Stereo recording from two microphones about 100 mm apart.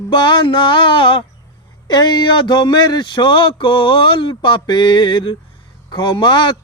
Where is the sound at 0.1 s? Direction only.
50° left (ahead or behind).